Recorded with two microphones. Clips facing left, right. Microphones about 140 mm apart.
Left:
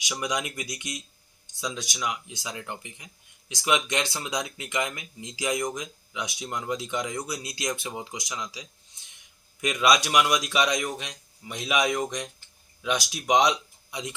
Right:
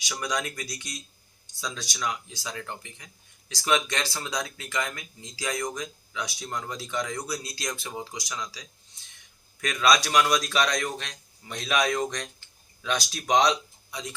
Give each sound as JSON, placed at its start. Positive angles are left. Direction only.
{"t": 0.0, "sound": "speech", "side_deg": 15}